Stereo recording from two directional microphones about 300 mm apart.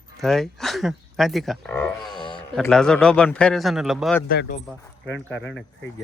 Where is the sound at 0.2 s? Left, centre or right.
Centre.